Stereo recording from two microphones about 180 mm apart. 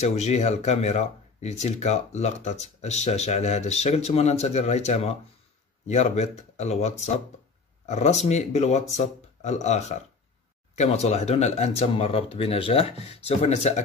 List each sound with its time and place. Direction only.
0.0 s speech: 40° left (ahead or behind)